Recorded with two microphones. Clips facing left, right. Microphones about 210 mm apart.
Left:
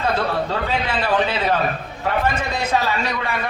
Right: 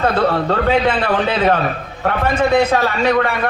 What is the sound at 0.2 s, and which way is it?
A man's voice, 55° right (ahead or behind).